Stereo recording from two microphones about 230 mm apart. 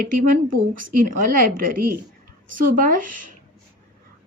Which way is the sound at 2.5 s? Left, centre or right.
Right.